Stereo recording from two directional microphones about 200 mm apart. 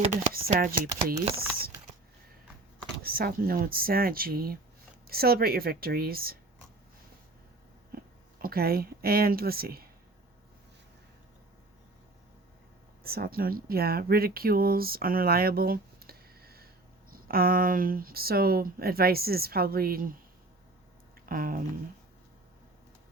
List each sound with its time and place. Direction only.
0.3 s speech: 45° right (ahead or behind)
3.0 s speech: 50° right (ahead or behind)
7.9 s speech: 45° right (ahead or behind)
13.0 s speech: 50° right (ahead or behind)
21.2 s speech: 45° right (ahead or behind)